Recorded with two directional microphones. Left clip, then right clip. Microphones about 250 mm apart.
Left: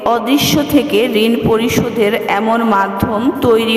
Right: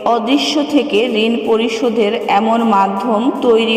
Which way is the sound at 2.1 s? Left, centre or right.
Left.